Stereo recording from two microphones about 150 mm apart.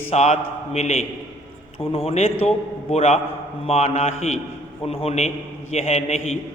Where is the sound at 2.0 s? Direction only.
40° left (ahead or behind).